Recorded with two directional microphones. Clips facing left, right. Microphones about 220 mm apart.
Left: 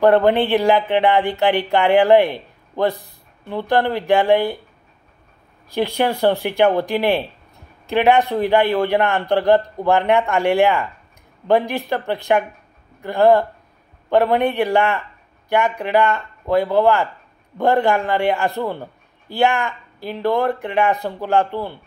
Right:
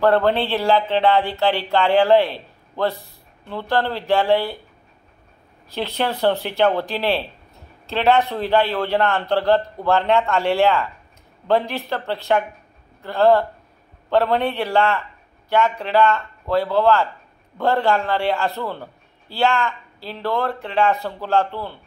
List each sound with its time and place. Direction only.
0.0 s speech: 15° left (ahead or behind)
5.7 s speech: 10° left (ahead or behind)